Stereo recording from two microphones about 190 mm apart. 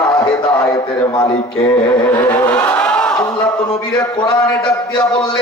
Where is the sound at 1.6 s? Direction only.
10° left (ahead or behind).